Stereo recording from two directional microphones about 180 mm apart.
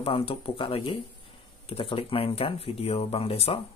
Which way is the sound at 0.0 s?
30° left (ahead or behind).